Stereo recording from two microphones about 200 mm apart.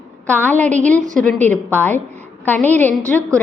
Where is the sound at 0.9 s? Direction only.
40° right (ahead or behind).